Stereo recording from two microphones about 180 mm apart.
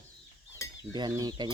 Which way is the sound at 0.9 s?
20° right (ahead or behind).